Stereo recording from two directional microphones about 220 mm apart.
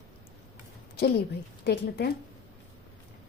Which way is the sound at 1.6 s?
50° left (ahead or behind).